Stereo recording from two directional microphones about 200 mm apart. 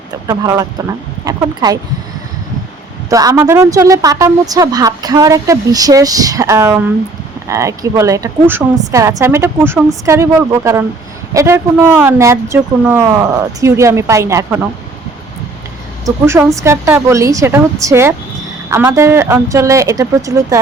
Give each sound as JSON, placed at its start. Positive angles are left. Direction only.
{"t": 0.3, "sound": "a woman's voice", "side_deg": -15}
{"t": 3.1, "sound": "a woman's voice", "side_deg": -15}
{"t": 16.0, "sound": "a woman's voice", "side_deg": -10}